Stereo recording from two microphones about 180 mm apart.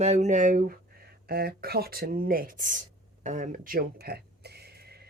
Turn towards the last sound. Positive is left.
turn(degrees=-65)  # may be behind; listen again after turning